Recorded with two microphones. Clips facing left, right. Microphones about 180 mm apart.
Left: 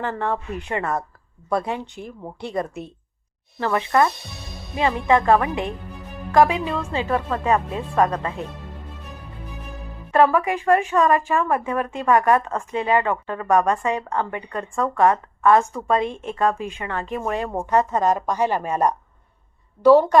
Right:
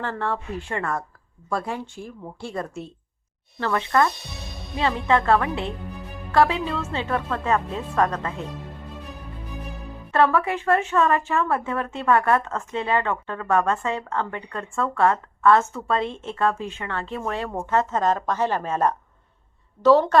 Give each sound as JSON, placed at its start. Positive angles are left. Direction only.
{"t": 0.0, "sound": "a woman's voice", "side_deg": 15}
{"t": 10.1, "sound": "a woman's voice", "side_deg": 15}